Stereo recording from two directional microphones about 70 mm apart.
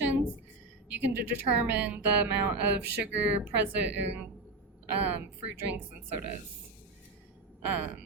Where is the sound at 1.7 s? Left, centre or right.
Right.